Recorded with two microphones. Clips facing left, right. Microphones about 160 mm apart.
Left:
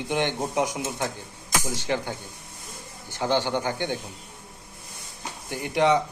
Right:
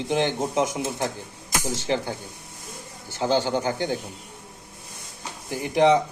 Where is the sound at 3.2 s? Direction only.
40° right (ahead or behind).